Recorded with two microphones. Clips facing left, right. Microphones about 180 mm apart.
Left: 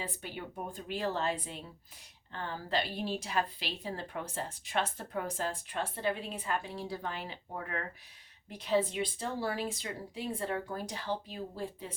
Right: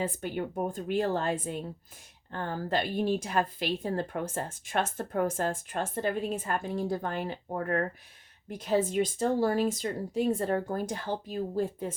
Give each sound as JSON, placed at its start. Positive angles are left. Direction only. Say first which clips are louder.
{"t": 0.0, "sound": "a woman's voice", "louder": "right 9 dB", "side_deg": -45}